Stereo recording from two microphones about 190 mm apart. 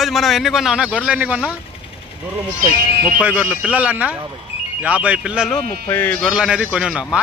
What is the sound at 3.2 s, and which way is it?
Speech, 5° right (ahead or behind).